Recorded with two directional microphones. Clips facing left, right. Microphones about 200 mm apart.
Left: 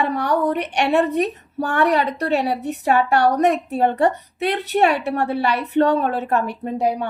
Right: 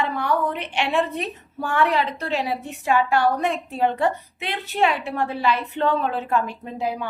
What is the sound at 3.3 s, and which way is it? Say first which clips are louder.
Speech: left 6 dB; 40° left (ahead or behind).